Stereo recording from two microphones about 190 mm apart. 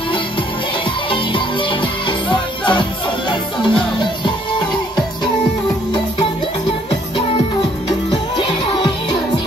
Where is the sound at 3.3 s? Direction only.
25° left (ahead or behind).